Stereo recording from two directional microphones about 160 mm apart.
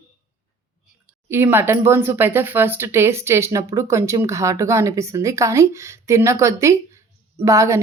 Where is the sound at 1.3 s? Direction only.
15° right (ahead or behind).